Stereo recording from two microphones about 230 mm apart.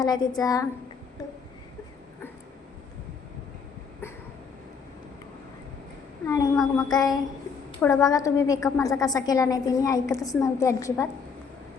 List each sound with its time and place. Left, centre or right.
0.0 s a woman's voice: centre
6.2 s a woman's voice: centre